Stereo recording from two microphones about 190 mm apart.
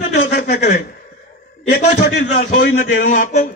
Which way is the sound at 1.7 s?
40° left (ahead or behind).